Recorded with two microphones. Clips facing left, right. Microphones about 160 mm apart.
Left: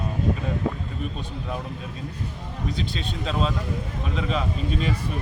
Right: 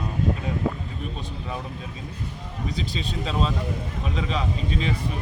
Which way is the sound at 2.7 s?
Centre (ahead or behind).